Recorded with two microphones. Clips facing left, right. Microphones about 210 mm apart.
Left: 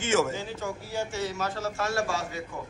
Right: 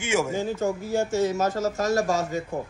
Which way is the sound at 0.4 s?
45° right (ahead or behind).